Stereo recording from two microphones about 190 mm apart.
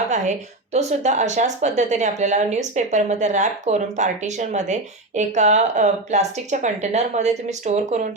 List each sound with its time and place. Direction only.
0.1 s a woman's voice: 35° right (ahead or behind)